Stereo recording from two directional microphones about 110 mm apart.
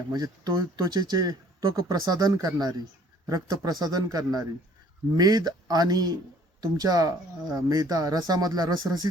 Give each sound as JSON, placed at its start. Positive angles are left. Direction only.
{"t": 0.1, "sound": "speech", "side_deg": -35}